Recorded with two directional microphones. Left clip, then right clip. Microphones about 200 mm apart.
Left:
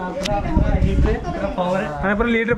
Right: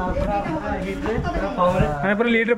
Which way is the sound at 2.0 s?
5° left (ahead or behind).